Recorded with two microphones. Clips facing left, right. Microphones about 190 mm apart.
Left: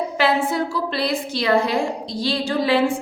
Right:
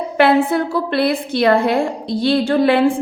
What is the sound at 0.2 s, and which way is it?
A woman's voice, 60° right (ahead or behind).